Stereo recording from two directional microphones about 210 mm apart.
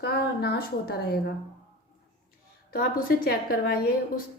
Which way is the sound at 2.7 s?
45° left (ahead or behind).